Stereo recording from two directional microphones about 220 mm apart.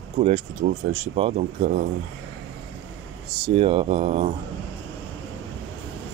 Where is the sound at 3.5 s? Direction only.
25° right (ahead or behind).